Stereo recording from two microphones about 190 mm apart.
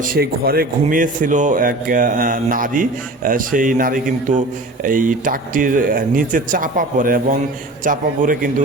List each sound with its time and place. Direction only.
0.0 s a man's voice: 50° right (ahead or behind)